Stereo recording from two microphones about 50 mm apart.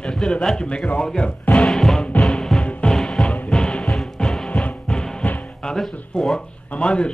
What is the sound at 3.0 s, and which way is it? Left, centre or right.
Music, centre.